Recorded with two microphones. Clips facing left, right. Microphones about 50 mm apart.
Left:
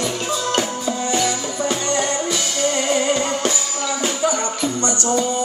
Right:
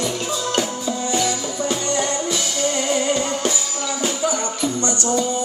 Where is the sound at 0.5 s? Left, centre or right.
Left.